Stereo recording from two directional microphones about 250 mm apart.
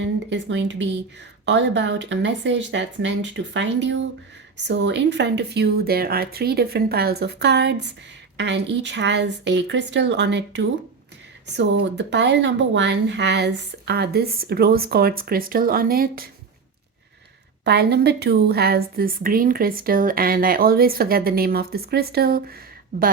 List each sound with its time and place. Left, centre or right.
0.3 s a woman's voice: right
17.6 s a woman's voice: right